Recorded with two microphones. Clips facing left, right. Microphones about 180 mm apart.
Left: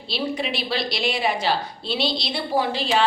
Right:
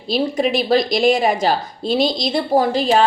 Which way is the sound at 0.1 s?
45° right (ahead or behind).